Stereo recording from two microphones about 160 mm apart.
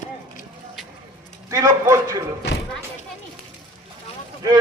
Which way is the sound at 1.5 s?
20° right (ahead or behind).